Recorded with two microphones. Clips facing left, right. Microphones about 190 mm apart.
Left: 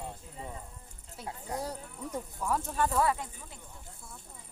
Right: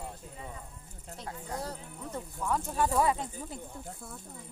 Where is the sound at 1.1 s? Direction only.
10° left (ahead or behind).